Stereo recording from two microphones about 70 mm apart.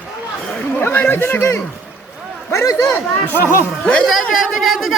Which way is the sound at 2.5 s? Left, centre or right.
Left.